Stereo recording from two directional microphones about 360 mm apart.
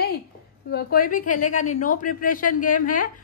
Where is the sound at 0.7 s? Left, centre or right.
Left.